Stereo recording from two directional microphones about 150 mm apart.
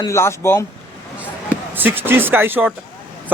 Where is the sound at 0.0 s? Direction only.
20° left (ahead or behind).